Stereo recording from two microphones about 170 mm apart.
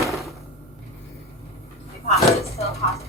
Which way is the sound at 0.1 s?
Centre (ahead or behind).